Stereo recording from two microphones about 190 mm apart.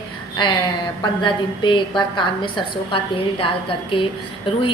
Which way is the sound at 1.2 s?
25° left (ahead or behind).